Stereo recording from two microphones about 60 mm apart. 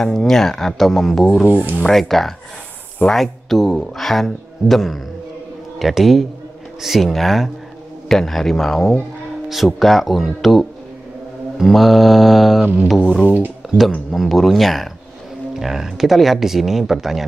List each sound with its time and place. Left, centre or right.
0.0 s speech: centre
1.5 s speech: right
1.9 s speech: centre
13.6 s a sound: centre
14.1 s speech: centre